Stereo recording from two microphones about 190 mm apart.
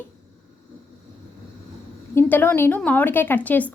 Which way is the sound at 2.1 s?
10° left (ahead or behind).